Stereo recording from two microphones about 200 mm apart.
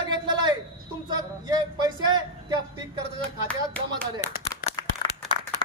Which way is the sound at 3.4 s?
5° left (ahead or behind).